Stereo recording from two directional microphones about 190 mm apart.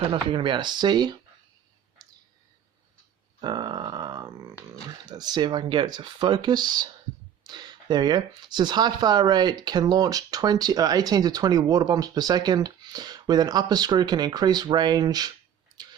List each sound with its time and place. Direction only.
0.1 s speech: 25° right (ahead or behind)
3.4 s grunt: 20° right (ahead or behind)
4.9 s speech: 20° right (ahead or behind)